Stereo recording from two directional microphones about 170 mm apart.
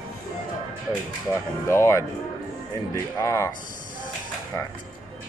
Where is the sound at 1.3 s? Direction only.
15° left (ahead or behind).